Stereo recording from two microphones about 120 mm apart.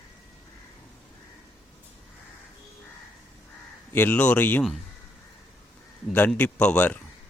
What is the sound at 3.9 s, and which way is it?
Speech, 15° left (ahead or behind).